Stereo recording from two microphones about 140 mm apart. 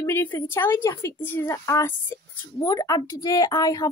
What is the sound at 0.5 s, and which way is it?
A woman's voice, 15° left (ahead or behind).